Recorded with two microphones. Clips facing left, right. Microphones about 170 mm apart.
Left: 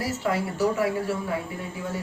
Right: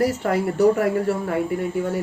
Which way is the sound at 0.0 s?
55° right (ahead or behind).